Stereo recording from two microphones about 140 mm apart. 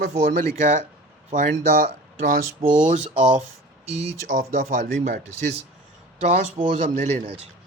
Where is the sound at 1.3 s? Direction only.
75° right (ahead or behind).